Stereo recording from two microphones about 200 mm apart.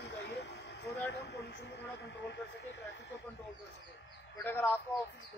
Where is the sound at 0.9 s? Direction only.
55° left (ahead or behind).